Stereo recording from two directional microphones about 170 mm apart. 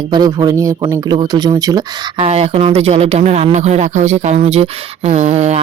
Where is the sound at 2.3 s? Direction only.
35° right (ahead or behind).